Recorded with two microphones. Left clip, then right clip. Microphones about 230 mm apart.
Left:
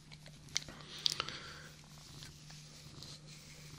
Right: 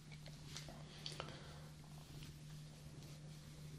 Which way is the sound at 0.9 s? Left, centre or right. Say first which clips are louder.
Left 15 dB; left.